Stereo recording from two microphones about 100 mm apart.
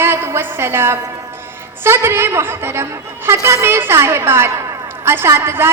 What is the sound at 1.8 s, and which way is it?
A woman's voice, 25° right (ahead or behind).